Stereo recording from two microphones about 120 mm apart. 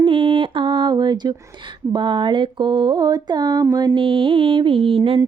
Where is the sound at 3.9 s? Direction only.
45° right (ahead or behind).